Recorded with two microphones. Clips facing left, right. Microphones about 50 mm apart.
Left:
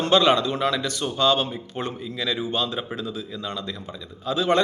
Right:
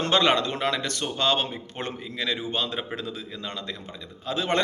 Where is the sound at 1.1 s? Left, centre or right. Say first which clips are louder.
Left 4 dB; right.